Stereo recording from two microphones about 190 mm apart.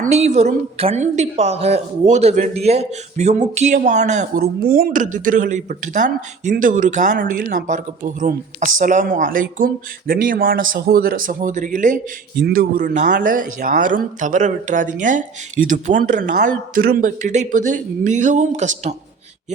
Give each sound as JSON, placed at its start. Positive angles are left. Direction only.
{"t": 0.0, "sound": "a woman's voice", "side_deg": -35}